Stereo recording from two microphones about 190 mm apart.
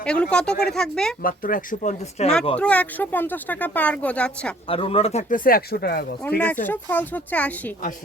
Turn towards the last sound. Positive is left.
turn(degrees=10)  # may be behind; listen again after turning